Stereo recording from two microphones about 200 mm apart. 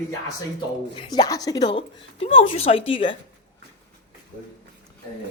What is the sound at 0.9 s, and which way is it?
Speech, 20° left (ahead or behind).